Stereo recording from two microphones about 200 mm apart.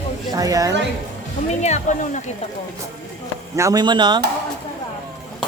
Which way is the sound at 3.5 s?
20° right (ahead or behind).